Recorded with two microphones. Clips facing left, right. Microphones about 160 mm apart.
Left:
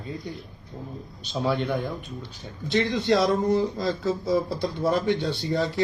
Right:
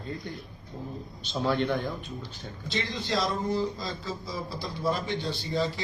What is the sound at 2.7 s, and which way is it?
A man's voice, 55° left (ahead or behind).